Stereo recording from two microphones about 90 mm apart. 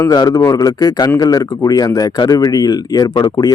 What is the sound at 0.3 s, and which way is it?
Speech, 40° left (ahead or behind).